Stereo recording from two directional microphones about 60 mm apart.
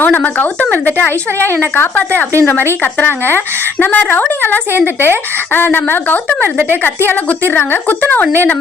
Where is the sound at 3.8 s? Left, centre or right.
Left.